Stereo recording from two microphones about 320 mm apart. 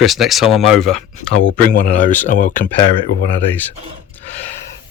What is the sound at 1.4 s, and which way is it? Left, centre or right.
Speech, left.